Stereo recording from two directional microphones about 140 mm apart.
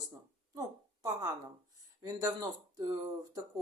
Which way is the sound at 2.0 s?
25° right (ahead or behind).